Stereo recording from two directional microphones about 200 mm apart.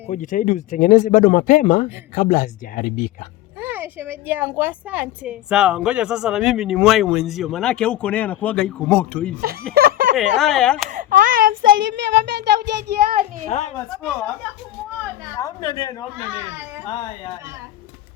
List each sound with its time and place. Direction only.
0.1 s speech: 40° left (ahead or behind)
3.6 s a woman's voice: 10° right (ahead or behind)
9.7 s snicker: 45° right (ahead or behind)
10.2 s a woman's voice: centre (ahead or behind)
10.8 s speech: 40° right (ahead or behind)
11.6 s a child's voice: 65° right (ahead or behind); by 13.2 s 50° right (ahead or behind)
13.5 s speech: 35° left (ahead or behind)
15.4 s a woman's voice: 15° left (ahead or behind)